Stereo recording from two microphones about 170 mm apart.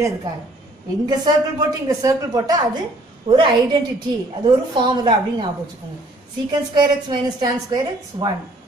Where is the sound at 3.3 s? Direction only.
35° right (ahead or behind).